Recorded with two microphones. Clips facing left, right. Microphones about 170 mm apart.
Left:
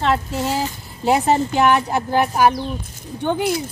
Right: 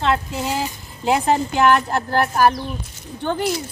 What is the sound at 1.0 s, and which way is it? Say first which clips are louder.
A woman's voice: left 2 dB; 5° left (ahead or behind).